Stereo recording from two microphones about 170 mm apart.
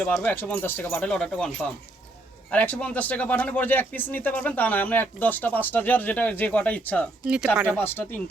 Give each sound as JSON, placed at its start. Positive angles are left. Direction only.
{"t": 0.0, "sound": "speech", "side_deg": 10}
{"t": 2.5, "sound": "speech", "side_deg": 10}